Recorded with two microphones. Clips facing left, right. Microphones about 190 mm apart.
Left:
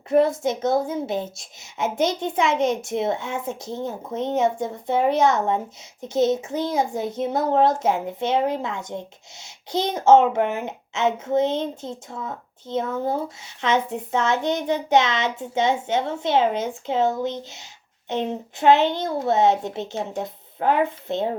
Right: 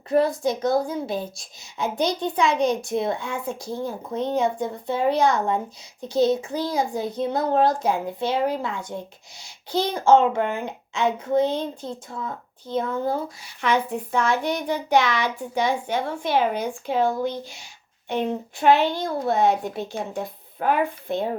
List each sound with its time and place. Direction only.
0.1 s a child's voice: 20° left (ahead or behind)